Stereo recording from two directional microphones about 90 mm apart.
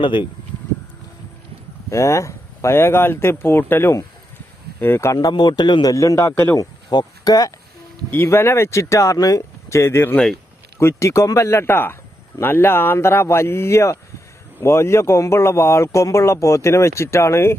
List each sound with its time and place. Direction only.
0.0 s speech: 65° left (ahead or behind)
1.9 s speech: 35° left (ahead or behind)
5.3 s a man's voice: 55° left (ahead or behind)
5.9 s speech: 35° left (ahead or behind)
6.6 s speech: 45° left (ahead or behind)
8.1 s speech: 25° left (ahead or behind)